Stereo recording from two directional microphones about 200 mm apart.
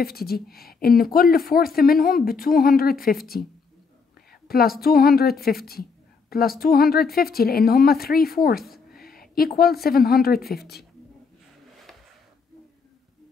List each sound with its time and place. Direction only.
0.0 s a woman's voice: 50° left (ahead or behind)
4.3 s a woman's voice: 50° left (ahead or behind)